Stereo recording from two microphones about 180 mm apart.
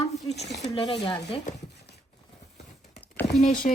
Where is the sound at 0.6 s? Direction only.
25° left (ahead or behind).